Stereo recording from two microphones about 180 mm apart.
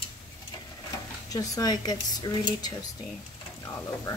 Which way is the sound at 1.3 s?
20° left (ahead or behind).